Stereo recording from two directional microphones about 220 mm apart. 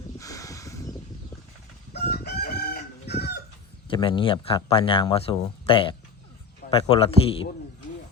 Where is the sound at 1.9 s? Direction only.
45° left (ahead or behind).